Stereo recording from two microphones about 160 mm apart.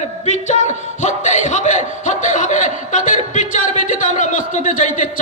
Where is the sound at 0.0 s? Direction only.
45° left (ahead or behind).